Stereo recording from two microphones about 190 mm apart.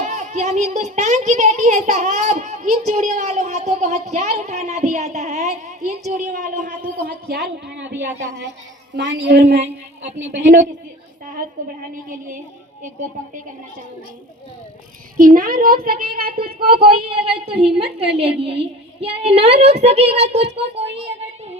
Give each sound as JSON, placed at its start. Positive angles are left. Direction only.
{"t": 0.0, "sound": "a child's voice", "side_deg": -40}
{"t": 9.6, "sound": "a child's voice", "side_deg": -35}
{"t": 12.8, "sound": "a child's voice", "side_deg": -40}
{"t": 15.2, "sound": "a man's voice", "side_deg": -50}
{"t": 17.6, "sound": "a child's voice", "side_deg": -30}
{"t": 18.0, "sound": "speech", "side_deg": -60}
{"t": 19.2, "sound": "a child's voice", "side_deg": -35}
{"t": 20.8, "sound": "speech", "side_deg": -65}